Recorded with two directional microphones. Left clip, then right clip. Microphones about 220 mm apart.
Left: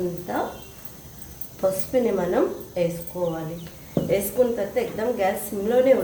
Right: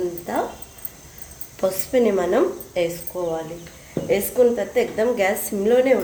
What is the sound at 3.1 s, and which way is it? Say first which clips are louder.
Speech: right 1 dB; 65° right (ahead or behind).